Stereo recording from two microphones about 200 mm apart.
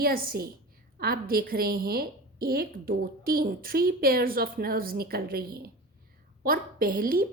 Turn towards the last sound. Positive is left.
turn(degrees=-45)  # may be behind; listen again after turning